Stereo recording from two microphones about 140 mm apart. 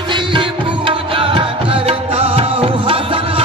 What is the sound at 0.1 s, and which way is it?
Music, 35° right (ahead or behind).